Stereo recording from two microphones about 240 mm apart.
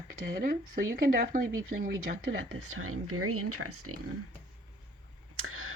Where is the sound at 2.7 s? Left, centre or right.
Right.